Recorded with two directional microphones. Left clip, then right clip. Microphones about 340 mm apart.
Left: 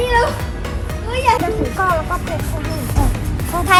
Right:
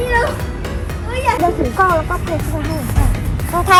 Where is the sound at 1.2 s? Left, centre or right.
Centre.